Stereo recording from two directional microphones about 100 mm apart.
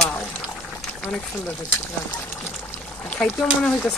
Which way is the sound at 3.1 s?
5° left (ahead or behind).